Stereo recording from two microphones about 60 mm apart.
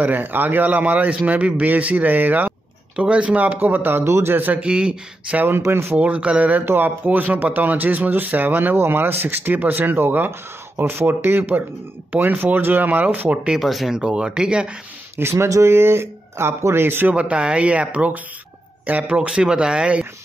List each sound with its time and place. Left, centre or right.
0.0 s a man's voice: right
3.0 s a man's voice: centre
4.0 s speech: right
4.4 s speech: right
4.6 s speech: centre
5.7 s speech: right
5.9 s a man's voice: right
6.6 s a man's voice: right
13.6 s speech: centre
13.9 s speech: centre
15.1 s speech: right
17.1 s a man's voice: centre